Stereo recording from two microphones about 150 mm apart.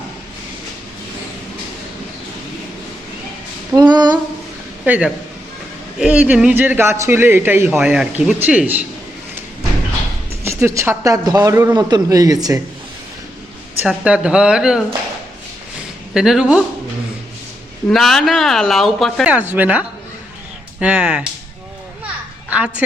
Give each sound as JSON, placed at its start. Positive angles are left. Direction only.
{"t": 3.7, "sound": "a sound", "side_deg": -25}
{"t": 4.9, "sound": "speech", "side_deg": -10}
{"t": 10.4, "sound": "a man's voice", "side_deg": -15}
{"t": 13.8, "sound": "speech", "side_deg": -10}
{"t": 16.1, "sound": "speech", "side_deg": -5}
{"t": 17.8, "sound": "speech", "side_deg": 0}
{"t": 19.3, "sound": "speech", "side_deg": -10}
{"t": 22.4, "sound": "speech", "side_deg": -10}